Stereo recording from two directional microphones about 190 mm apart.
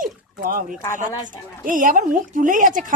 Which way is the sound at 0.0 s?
45° right (ahead or behind).